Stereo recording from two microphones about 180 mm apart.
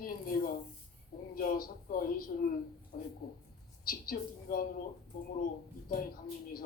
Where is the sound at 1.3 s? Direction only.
55° left (ahead or behind).